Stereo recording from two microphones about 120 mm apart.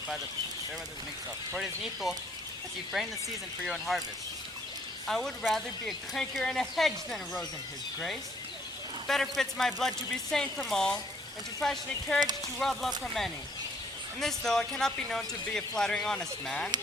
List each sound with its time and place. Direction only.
1.5 s speech: centre (ahead or behind)
3.6 s speech: centre (ahead or behind)
5.0 s speech: centre (ahead or behind)
9.0 s speech: centre (ahead or behind)
14.2 s speech: 5° left (ahead or behind)